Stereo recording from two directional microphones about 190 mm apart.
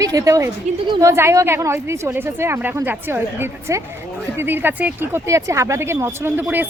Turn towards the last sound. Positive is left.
turn(degrees=-10)  # may be behind; listen again after turning